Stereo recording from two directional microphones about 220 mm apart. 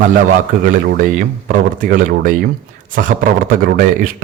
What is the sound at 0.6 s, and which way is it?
A man's voice, 40° right (ahead or behind).